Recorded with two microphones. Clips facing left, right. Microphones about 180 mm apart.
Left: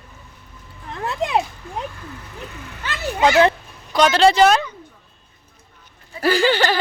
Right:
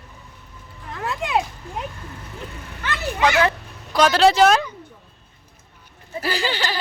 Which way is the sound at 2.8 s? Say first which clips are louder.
Left 2 dB; 25° left (ahead or behind).